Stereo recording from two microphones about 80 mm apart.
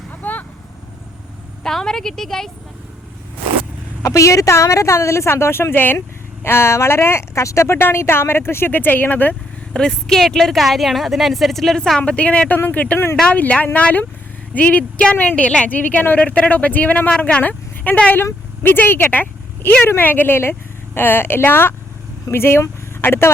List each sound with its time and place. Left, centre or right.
0.2 s vehicle: left
1.6 s a woman's voice: centre
4.0 s speech: left
9.7 s a woman's voice: centre; by 23.3 s left